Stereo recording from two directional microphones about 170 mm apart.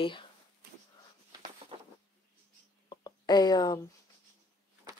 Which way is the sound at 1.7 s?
30° right (ahead or behind).